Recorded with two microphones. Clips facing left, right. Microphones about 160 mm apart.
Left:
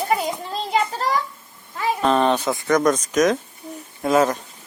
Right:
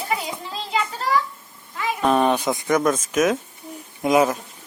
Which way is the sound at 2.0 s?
10° right (ahead or behind).